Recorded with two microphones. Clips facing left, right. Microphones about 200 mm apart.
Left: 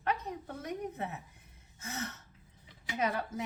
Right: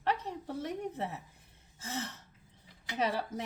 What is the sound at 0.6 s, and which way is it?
Speech, 30° right (ahead or behind).